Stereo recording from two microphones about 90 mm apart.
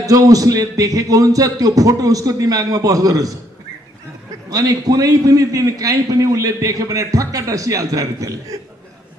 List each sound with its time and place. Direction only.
0.0 s a man's voice: 40° right (ahead or behind)
4.5 s a man's voice: 40° right (ahead or behind)